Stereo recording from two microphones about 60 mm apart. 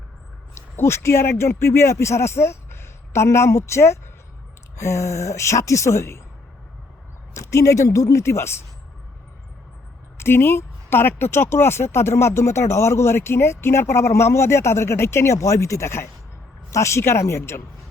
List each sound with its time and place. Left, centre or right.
0.5 s a woman's voice: left
7.3 s a woman's voice: left
10.2 s speech: left